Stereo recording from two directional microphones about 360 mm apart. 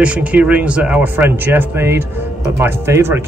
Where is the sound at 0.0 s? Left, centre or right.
Centre.